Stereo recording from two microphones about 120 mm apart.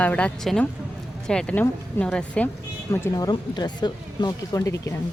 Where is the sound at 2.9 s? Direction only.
25° left (ahead or behind).